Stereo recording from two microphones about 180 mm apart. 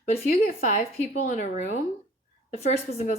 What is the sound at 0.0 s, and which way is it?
A woman's voice, 40° left (ahead or behind).